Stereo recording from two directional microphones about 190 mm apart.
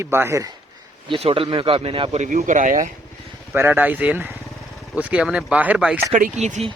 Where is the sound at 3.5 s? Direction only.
10° right (ahead or behind).